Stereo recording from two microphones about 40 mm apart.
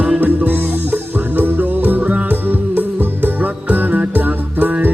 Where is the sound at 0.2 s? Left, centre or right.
Right.